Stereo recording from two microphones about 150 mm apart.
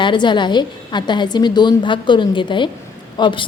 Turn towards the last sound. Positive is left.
turn(degrees=35)  # may be behind; listen again after turning